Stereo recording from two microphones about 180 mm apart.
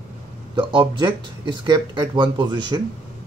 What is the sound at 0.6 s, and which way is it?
Speech, 25° right (ahead or behind).